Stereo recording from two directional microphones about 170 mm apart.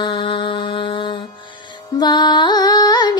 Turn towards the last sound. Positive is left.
turn(degrees=25)  # may be behind; listen again after turning